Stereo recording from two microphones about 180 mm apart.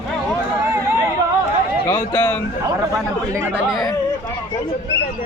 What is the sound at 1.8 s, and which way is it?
Speech, 10° left (ahead or behind).